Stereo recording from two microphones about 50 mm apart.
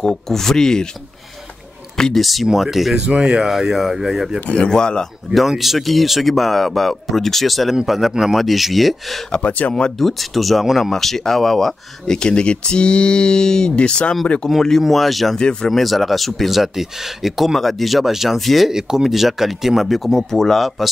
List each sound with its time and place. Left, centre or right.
0.0 s speech: centre
2.0 s speech: centre
2.4 s speech: centre
3.1 s speech: centre
3.4 s speech: centre
4.5 s speech: centre
5.3 s speech: centre
9.3 s speech: left
9.9 s speech: centre; by 14.5 s left
14.8 s speech: centre
15.3 s speech: centre
15.7 s speech: centre
18.7 s speech: centre